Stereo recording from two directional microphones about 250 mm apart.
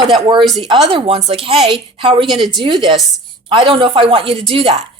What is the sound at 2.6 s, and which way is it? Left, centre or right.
A woman's voice, centre.